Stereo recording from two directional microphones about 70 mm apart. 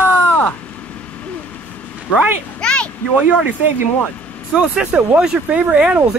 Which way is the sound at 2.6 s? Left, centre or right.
Centre.